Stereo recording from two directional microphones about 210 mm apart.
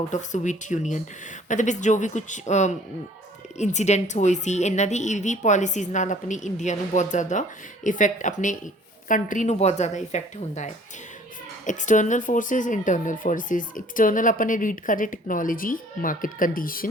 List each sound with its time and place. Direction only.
0.1 s speech: 35° left (ahead or behind)